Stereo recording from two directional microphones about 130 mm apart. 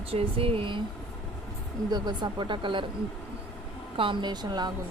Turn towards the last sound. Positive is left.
turn(degrees=-35)  # may be behind; listen again after turning